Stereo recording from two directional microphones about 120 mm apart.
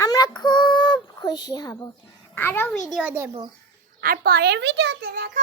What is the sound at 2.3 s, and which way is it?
Speech, 20° left (ahead or behind).